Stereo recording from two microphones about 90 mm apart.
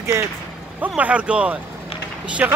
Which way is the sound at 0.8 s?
15° right (ahead or behind).